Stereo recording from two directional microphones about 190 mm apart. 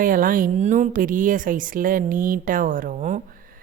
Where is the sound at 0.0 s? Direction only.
45° right (ahead or behind).